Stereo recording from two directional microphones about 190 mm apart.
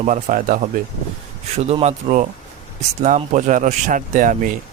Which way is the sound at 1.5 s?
35° right (ahead or behind).